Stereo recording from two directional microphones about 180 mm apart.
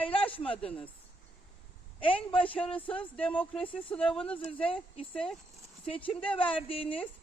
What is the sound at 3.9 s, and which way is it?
Speech, 5° left (ahead or behind).